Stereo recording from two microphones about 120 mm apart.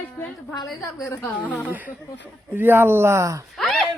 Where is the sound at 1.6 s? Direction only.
15° right (ahead or behind).